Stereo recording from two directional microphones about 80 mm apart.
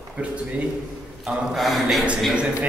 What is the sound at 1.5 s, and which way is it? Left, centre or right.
Speech, centre.